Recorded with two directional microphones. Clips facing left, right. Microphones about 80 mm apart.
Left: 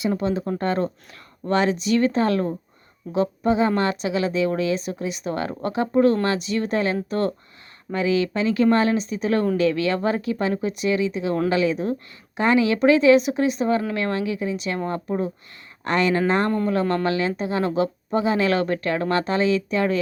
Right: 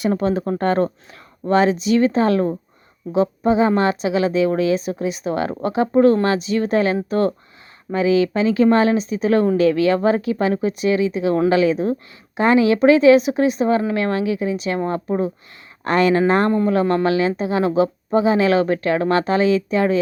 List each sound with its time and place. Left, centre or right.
0.1 s a woman's voice: right
7.9 s a woman's voice: right
14.5 s speech: right
14.8 s a woman's voice: right
15.8 s speech: right
16.8 s a woman's voice: centre; by 19.8 s right